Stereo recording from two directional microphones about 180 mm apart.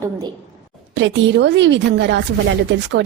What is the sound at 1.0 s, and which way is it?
Speech, 90° right.